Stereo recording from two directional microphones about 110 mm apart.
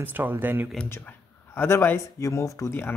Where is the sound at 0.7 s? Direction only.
15° left (ahead or behind).